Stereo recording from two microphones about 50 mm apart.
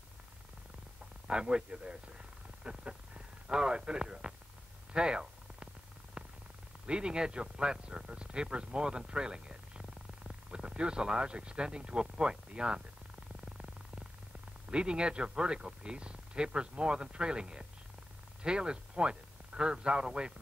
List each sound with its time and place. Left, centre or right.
1.2 s speech: centre
4.9 s a sound: centre
6.2 s purr: right
6.9 s speech: centre
13.5 s purr: centre
14.7 s speech: centre